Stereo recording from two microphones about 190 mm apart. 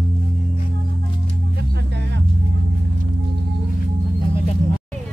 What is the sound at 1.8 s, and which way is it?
Music, 65° right (ahead or behind).